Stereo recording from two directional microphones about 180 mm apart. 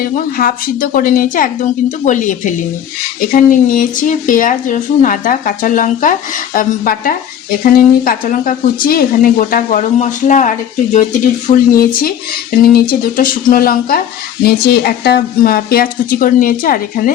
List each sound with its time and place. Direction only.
0.0 s a woman's voice: 55° left (ahead or behind)